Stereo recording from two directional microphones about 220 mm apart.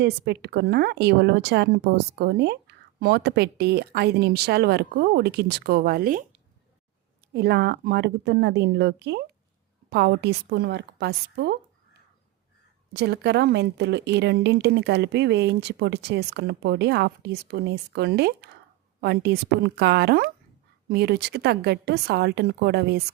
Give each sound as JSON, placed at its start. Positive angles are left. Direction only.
{"t": 0.4, "sound": "speech", "side_deg": -50}
{"t": 7.3, "sound": "speech", "side_deg": -50}
{"t": 12.9, "sound": "speech", "side_deg": -50}